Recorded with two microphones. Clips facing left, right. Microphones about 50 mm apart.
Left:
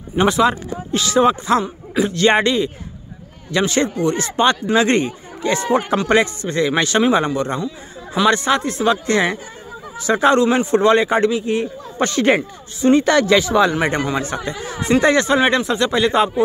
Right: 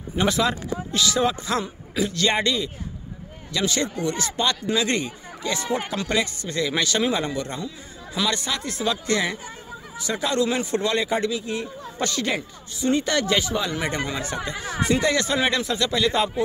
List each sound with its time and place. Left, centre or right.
0.1 s speech: left
9.9 s speech: left
10.4 s speech: left
13.7 s speech: left